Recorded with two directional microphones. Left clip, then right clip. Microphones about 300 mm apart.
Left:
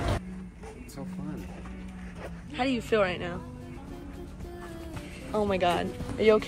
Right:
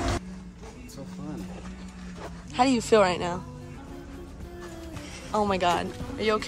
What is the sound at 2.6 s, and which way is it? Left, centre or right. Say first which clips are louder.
Speech: right 6 dB; centre.